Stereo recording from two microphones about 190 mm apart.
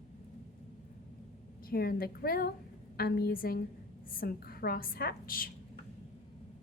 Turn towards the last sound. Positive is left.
turn(degrees=50)  # may be behind; listen again after turning